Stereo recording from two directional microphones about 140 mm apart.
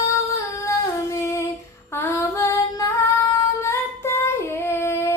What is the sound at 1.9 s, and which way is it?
Female singing, 20° left (ahead or behind).